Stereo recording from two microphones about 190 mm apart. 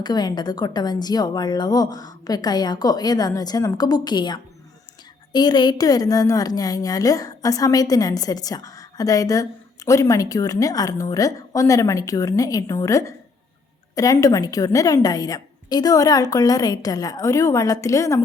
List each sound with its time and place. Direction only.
0.0 s a woman's voice: 20° left (ahead or behind)